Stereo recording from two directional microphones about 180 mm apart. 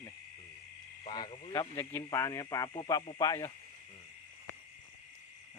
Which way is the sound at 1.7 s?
10° left (ahead or behind).